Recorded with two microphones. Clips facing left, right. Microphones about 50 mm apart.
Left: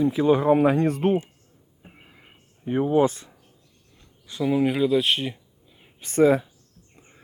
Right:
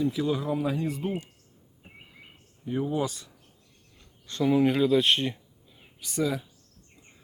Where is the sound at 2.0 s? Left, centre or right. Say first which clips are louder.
Even; left.